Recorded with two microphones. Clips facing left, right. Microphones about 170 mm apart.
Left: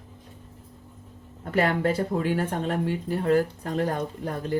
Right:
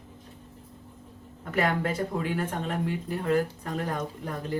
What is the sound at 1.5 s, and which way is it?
Speech, 30° left (ahead or behind).